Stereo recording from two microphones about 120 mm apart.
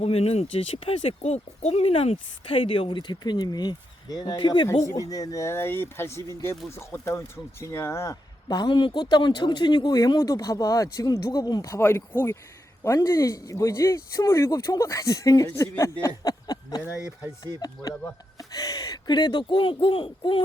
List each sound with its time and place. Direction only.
0.0 s speech: 60° left (ahead or behind); by 4.7 s 40° left (ahead or behind)
4.9 s speech: 30° left (ahead or behind)
18.3 s speech: 30° left (ahead or behind); by 20.4 s 45° left (ahead or behind)